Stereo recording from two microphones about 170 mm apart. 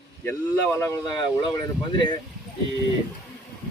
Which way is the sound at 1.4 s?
30° left (ahead or behind).